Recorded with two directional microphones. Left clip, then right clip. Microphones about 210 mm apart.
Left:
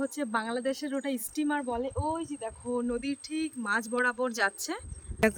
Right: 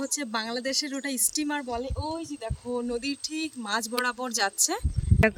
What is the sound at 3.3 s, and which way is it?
Speech, 35° right (ahead or behind).